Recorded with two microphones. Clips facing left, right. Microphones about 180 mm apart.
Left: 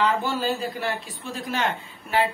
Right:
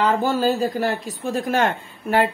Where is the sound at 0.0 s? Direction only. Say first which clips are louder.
Right 5 dB; 45° right (ahead or behind).